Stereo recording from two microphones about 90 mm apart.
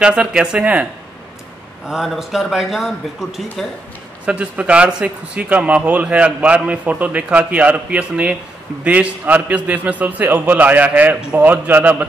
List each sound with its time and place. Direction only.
0.0 s speech: 10° right (ahead or behind)
1.9 s a man's voice: 5° right (ahead or behind)
4.3 s speech: 15° right (ahead or behind)